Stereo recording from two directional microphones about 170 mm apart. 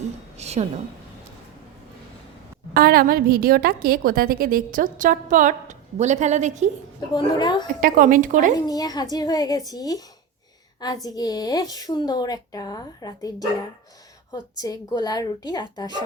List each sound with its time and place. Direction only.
0.3 s a sound: 40° right (ahead or behind)
2.7 s a woman's voice: 60° right (ahead or behind); by 6.7 s 45° right (ahead or behind)
7.1 s a woman's voice: 25° left (ahead or behind)
7.8 s a woman's voice: 55° right (ahead or behind)
8.5 s a woman's voice: 20° left (ahead or behind)